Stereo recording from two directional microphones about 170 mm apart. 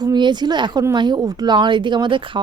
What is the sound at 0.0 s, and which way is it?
Speech, 25° right (ahead or behind).